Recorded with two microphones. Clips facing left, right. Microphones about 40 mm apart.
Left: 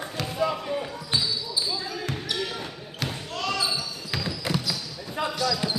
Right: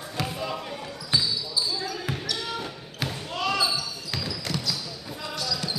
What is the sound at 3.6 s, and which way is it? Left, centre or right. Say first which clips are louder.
Basketball bounce: right 1 dB; centre.